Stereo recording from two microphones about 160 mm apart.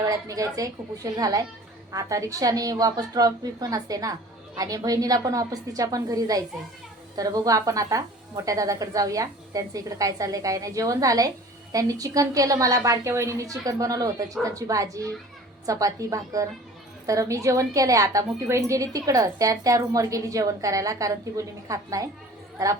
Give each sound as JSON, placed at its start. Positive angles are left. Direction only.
{"t": 0.0, "sound": "a woman's voice", "side_deg": -20}